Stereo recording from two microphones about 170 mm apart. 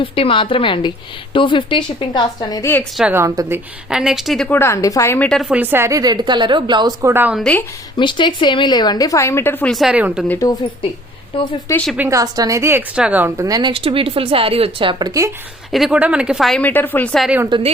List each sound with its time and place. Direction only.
0.0 s a woman's voice: 30° left (ahead or behind)
3.0 s a woman's voice: 15° right (ahead or behind)
3.8 s speech: 5° right (ahead or behind)
4.5 s a woman's voice: 15° left (ahead or behind)
5.3 s a woman's voice: 5° right (ahead or behind); by 7.1 s 25° right (ahead or behind)
7.1 s a woman's voice: 10° right (ahead or behind)
7.3 s speech: 5° left (ahead or behind)
7.9 s a woman's voice: 30° left (ahead or behind); by 9.7 s 10° left (ahead or behind)
9.7 s speech: 5° right (ahead or behind)
10.2 s a woman's voice: 20° left (ahead or behind)
11.3 s speech: 30° left (ahead or behind)
11.9 s a woman's voice: 20° right (ahead or behind)
15.7 s speech: 5° right (ahead or behind)
17.2 s a woman's voice: 10° right (ahead or behind)